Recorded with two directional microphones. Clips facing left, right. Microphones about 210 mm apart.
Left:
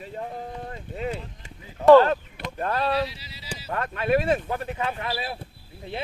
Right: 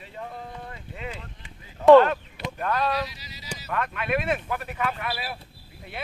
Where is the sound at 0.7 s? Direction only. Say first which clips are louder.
Left 6 dB; 40° left (ahead or behind).